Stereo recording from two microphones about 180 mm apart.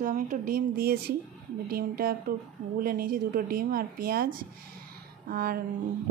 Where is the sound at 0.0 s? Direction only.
45° right (ahead or behind).